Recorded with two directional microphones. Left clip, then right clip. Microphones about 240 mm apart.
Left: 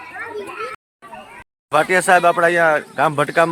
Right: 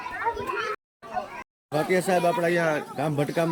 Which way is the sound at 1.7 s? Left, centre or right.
Centre.